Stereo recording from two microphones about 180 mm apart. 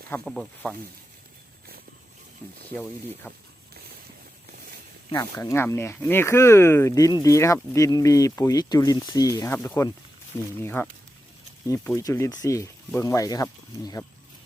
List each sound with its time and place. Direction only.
0.3 s speech: 5° left (ahead or behind)
3.2 s speech: 10° left (ahead or behind)
5.1 s speech: 15° left (ahead or behind)